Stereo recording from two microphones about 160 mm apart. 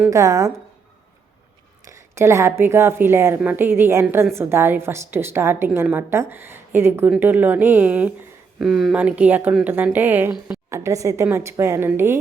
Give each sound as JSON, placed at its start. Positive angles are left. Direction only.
{"t": 0.1, "sound": "speech", "side_deg": -20}
{"t": 2.0, "sound": "a woman's voice", "side_deg": -15}